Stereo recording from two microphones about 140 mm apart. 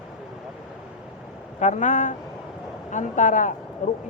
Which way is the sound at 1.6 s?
60° left (ahead or behind).